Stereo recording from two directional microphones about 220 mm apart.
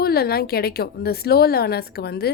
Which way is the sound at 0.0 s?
45° left (ahead or behind).